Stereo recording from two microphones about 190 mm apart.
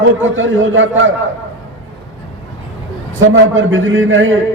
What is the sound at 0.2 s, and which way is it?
Speech, 90° right.